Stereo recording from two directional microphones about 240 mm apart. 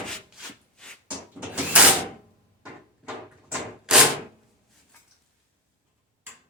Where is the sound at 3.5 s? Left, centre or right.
Centre.